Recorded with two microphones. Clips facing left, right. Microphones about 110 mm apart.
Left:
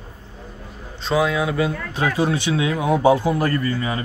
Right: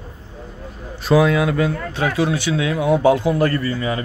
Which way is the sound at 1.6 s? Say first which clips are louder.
Right 2 dB; 15° left (ahead or behind).